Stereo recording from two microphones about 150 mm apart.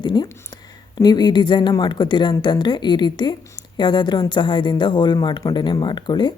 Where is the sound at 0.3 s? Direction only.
25° left (ahead or behind).